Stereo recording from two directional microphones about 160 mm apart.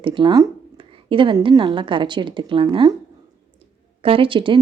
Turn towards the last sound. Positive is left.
turn(degrees=-30)  # may be behind; listen again after turning